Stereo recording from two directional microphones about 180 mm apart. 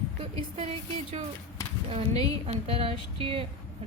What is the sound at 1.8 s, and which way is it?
A woman's voice, 35° right (ahead or behind).